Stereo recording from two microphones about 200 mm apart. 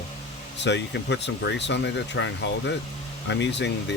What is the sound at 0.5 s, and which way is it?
Speech, 60° left (ahead or behind).